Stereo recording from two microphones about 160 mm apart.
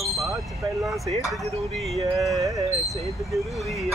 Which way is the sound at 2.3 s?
20° right (ahead or behind).